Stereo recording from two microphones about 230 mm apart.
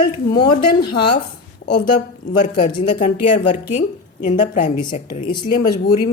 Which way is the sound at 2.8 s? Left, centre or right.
Left.